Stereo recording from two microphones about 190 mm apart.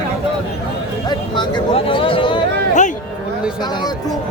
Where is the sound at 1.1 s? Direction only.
25° left (ahead or behind).